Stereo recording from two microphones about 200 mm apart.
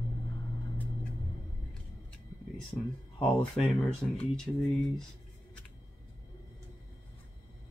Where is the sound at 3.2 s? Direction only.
Centre (ahead or behind).